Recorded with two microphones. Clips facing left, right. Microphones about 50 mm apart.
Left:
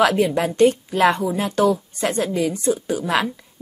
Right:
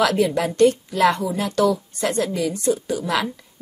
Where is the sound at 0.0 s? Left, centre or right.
Centre.